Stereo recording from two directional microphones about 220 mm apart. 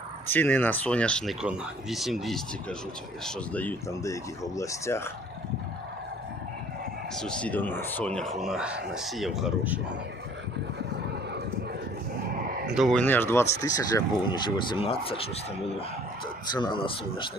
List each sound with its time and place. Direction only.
0.3 s speech: 10° left (ahead or behind)
7.2 s speech: 5° left (ahead or behind)
12.6 s speech: centre (ahead or behind); by 15.3 s 25° left (ahead or behind)
16.5 s speech: 20° left (ahead or behind)